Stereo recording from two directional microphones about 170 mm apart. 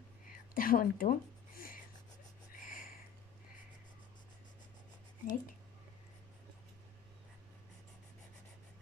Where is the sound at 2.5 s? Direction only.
55° left (ahead or behind).